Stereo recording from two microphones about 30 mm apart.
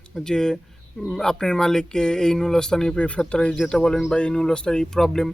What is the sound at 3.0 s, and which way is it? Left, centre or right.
Speech, left.